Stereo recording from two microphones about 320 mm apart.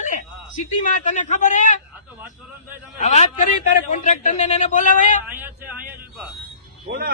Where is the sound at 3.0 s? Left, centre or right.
Left.